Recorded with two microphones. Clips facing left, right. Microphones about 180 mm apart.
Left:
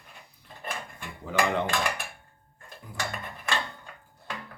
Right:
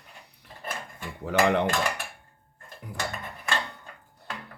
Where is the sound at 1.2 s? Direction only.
70° right (ahead or behind).